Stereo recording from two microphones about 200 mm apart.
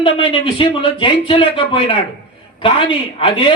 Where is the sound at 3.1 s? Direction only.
25° left (ahead or behind).